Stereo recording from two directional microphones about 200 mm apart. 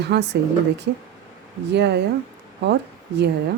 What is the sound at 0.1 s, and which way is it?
Speech, 55° right (ahead or behind).